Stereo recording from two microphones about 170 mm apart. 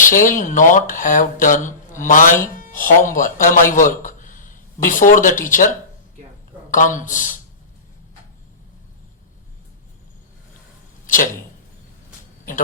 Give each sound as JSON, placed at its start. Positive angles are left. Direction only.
{"t": 0.0, "sound": "a man's voice", "side_deg": 50}
{"t": 11.0, "sound": "arrow", "side_deg": 50}